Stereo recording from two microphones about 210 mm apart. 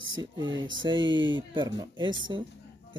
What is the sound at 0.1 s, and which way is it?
Speech, 20° right (ahead or behind).